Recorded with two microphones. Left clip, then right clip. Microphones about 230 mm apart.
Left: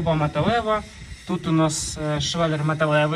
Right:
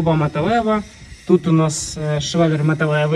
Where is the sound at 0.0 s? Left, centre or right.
Centre.